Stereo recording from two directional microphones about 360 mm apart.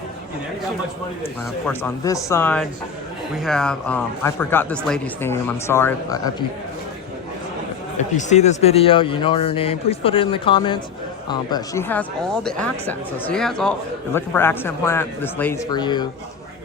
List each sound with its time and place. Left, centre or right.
1.6 s speech: centre
8.1 s speech: centre